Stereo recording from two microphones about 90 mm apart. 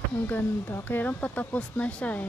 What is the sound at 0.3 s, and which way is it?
Speech, 25° left (ahead or behind).